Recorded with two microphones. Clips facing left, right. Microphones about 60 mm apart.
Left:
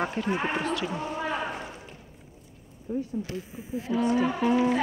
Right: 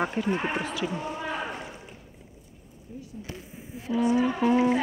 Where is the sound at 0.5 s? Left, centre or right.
Centre.